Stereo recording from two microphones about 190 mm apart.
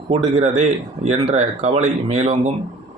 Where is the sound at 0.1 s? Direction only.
30° right (ahead or behind).